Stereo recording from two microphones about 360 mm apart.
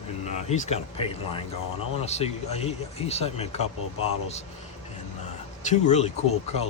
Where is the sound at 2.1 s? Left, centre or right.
Centre.